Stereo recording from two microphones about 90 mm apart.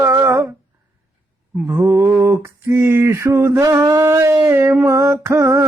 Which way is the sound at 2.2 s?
30° right (ahead or behind).